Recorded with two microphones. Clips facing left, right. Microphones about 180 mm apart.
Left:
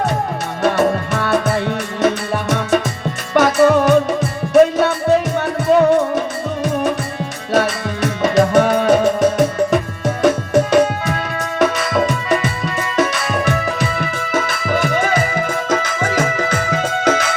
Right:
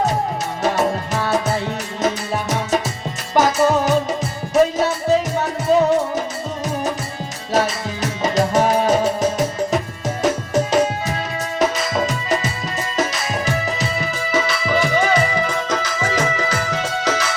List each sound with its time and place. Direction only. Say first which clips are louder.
0.6 s music: left 4 dB; 60° left (ahead or behind)